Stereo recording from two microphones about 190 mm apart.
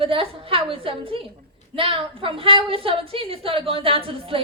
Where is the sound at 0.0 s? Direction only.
30° right (ahead or behind).